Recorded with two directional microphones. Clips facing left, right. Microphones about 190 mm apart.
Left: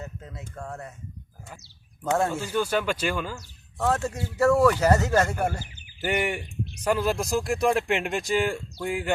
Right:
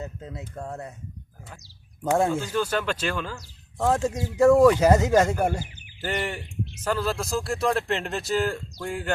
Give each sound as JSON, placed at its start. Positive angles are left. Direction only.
{"t": 0.0, "sound": "speech", "side_deg": -20}
{"t": 2.4, "sound": "speech", "side_deg": 10}
{"t": 3.8, "sound": "speech", "side_deg": -15}
{"t": 6.0, "sound": "speech", "side_deg": 10}